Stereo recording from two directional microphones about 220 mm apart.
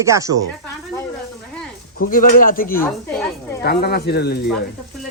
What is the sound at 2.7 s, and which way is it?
Speech, 10° left (ahead or behind).